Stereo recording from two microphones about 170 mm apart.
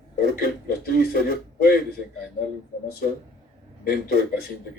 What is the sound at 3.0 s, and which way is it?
Speech, 60° left (ahead or behind).